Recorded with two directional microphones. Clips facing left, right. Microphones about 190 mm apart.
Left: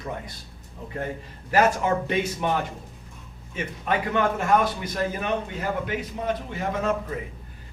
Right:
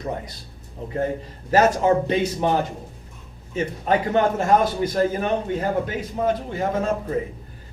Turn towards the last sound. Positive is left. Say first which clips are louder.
# right 3 dB
turn(degrees=-35)  # may be behind; listen again after turning